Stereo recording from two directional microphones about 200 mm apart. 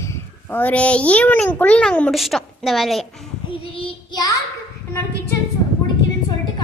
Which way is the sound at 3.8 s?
20° left (ahead or behind).